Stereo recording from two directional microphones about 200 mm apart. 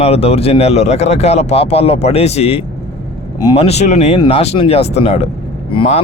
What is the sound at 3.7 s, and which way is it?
Speech, 35° left (ahead or behind).